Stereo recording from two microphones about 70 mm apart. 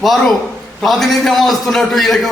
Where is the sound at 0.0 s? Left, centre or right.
Centre.